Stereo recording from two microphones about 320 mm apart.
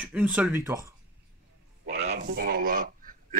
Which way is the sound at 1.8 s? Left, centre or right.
Right.